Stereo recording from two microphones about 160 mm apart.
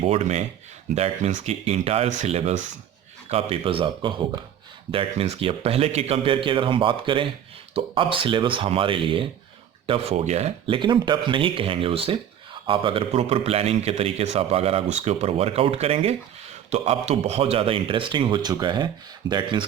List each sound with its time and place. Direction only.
0.0 s a man's voice: 40° right (ahead or behind)
10.8 s a man's voice: 30° right (ahead or behind)